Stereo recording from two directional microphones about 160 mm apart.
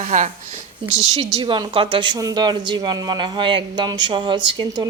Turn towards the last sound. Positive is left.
turn(degrees=-30)  # may be behind; listen again after turning